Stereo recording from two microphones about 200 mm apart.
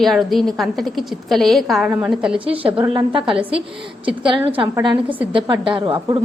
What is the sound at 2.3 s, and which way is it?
A woman's voice, 25° right (ahead or behind).